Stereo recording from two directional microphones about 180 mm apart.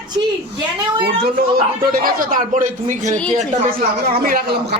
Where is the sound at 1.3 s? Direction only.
55° right (ahead or behind).